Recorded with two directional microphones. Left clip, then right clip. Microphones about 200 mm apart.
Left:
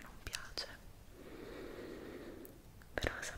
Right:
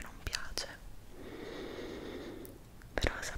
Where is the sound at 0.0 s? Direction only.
15° right (ahead or behind).